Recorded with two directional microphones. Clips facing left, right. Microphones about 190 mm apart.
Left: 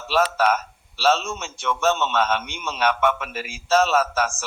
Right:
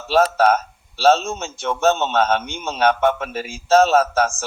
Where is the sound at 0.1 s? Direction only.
35° right (ahead or behind).